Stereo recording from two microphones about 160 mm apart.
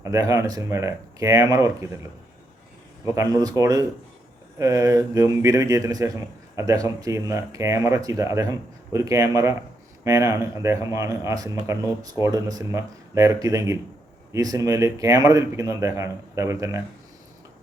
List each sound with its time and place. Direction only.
0.0 s a man's voice: 20° right (ahead or behind)
3.6 s a man's voice: 20° right (ahead or behind)